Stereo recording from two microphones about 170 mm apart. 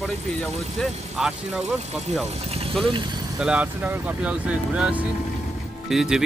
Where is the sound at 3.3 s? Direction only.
5° right (ahead or behind).